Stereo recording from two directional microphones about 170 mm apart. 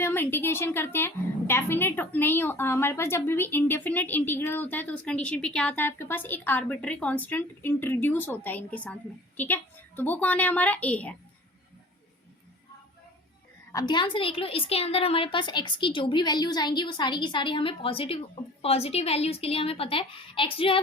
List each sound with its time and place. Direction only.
0.0 s a woman's voice: 15° left (ahead or behind)
13.7 s a woman's voice: 25° left (ahead or behind)